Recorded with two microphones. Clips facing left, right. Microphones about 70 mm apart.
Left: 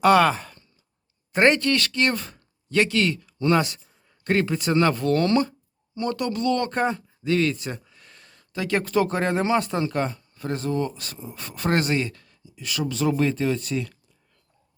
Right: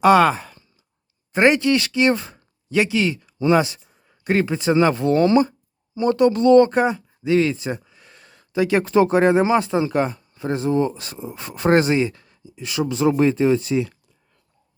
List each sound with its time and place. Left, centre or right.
0.0 s speech: centre; by 6.7 s right
6.7 s speech: centre